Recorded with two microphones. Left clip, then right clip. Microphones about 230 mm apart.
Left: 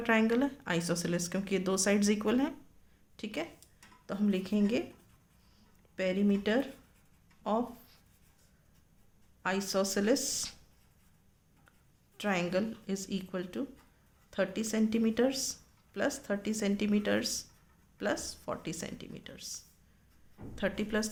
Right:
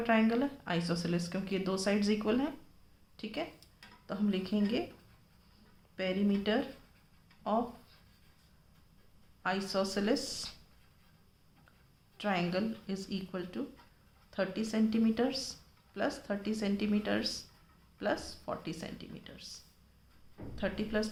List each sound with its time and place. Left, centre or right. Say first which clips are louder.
0.0 s speech: left 1 dB; left
6.0 s speech: left 2 dB; left
9.4 s speech: left 1 dB; left
12.1 s speech: left 2 dB; left